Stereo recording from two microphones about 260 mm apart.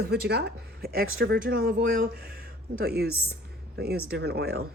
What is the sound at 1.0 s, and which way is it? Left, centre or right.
Speech, right.